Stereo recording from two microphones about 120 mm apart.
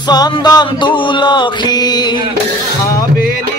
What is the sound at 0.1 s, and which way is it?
Music, 35° left (ahead or behind).